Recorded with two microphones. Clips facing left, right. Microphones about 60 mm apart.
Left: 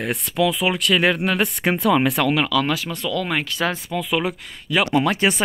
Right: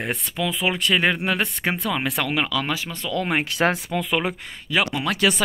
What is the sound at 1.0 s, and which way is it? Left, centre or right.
Speech, centre.